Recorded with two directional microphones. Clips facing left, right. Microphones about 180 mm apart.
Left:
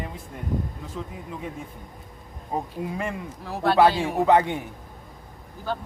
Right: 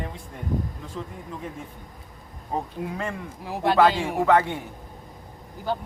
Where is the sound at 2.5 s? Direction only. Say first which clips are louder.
Even; 15° left (ahead or behind).